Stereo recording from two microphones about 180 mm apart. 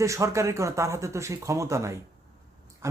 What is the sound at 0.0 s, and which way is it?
Speech, 15° right (ahead or behind).